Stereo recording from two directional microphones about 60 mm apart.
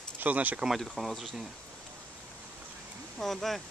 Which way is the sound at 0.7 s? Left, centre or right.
Centre.